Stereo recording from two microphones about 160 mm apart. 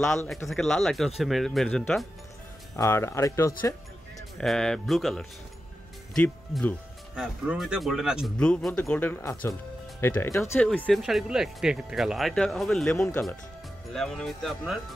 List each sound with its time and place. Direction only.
0.5 s speech: centre (ahead or behind)
2.7 s speech: 20° left (ahead or behind)
4.4 s speech: 5° left (ahead or behind)